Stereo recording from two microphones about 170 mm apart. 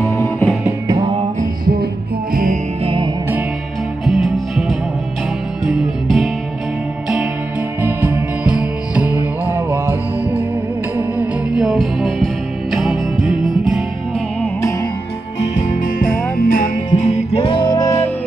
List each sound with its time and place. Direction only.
2.3 s music: 50° right (ahead or behind)
2.8 s music: 30° right (ahead or behind)
4.0 s music: centre (ahead or behind)
5.7 s music: centre (ahead or behind)
7.8 s music: 10° right (ahead or behind)
11.0 s music: 5° right (ahead or behind)
13.2 s music: 50° right (ahead or behind)
15.5 s music: 50° left (ahead or behind)
17.4 s music: 30° left (ahead or behind)